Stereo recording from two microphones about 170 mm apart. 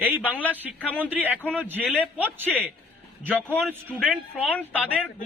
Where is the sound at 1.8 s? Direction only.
5° left (ahead or behind).